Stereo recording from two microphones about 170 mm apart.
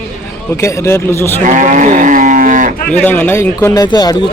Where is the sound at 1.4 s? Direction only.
45° right (ahead or behind).